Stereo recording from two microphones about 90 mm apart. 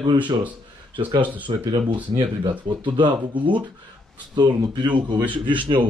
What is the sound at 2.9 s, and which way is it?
Speech, 60° right (ahead or behind).